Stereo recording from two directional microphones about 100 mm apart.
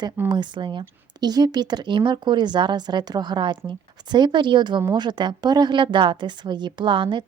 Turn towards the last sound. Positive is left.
turn(degrees=-55)  # may be behind; listen again after turning